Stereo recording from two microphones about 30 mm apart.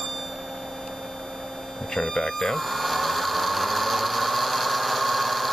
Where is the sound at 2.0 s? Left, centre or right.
Centre.